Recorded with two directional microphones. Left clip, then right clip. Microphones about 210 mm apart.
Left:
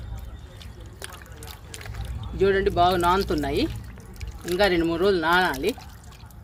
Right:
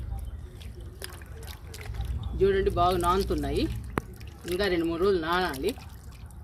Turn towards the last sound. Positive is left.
turn(degrees=30)  # may be behind; listen again after turning